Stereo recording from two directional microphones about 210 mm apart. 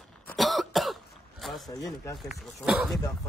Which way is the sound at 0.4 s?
Centre (ahead or behind).